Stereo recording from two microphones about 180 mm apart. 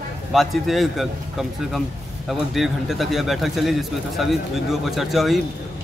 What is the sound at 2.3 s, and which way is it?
A man's voice, centre (ahead or behind).